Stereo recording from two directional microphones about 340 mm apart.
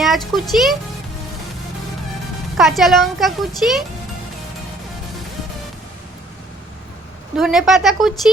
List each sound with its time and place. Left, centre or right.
0.0 s a child's voice: centre
2.6 s a child's voice: centre
7.3 s a child's voice: centre